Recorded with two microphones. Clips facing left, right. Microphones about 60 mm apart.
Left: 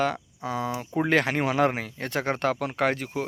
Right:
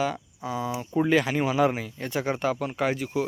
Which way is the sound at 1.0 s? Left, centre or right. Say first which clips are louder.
Right 1 dB; left.